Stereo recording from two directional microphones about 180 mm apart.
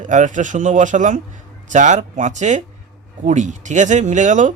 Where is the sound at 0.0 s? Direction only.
45° right (ahead or behind).